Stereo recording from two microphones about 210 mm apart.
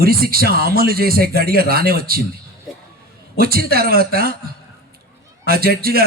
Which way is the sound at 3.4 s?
45° right (ahead or behind).